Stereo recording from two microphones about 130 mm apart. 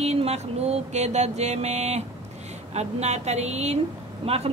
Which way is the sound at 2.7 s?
55° right (ahead or behind).